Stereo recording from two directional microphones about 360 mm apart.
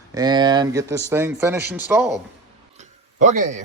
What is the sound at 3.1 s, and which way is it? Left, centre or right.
Speech, right.